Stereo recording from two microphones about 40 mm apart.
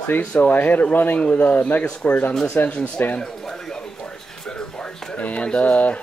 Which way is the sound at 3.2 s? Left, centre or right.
Centre.